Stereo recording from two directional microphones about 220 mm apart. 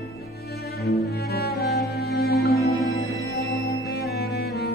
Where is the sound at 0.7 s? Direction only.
45° left (ahead or behind).